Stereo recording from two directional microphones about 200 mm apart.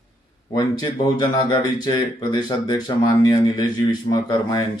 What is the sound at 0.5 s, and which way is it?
Speech, 20° left (ahead or behind).